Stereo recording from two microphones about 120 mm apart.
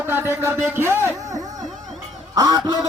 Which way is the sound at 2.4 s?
30° right (ahead or behind).